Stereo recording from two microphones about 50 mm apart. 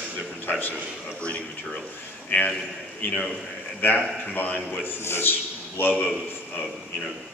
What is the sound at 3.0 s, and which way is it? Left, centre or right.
A man's voice, left.